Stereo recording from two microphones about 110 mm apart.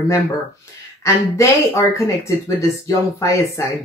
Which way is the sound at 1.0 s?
25° left (ahead or behind).